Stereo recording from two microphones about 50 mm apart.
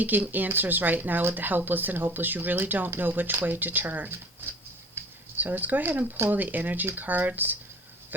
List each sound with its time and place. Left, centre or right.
0.0 s speech: right
5.0 s a sound: right
5.4 s speech: right